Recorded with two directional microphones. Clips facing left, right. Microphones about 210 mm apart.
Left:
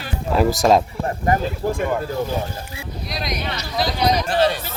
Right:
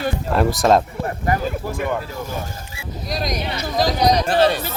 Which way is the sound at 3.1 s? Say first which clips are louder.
Right 3 dB; 45° right (ahead or behind).